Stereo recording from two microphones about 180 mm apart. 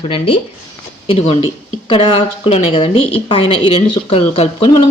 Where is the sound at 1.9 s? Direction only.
30° left (ahead or behind).